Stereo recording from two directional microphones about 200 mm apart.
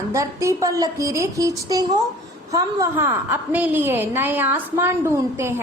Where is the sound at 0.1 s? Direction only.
15° right (ahead or behind).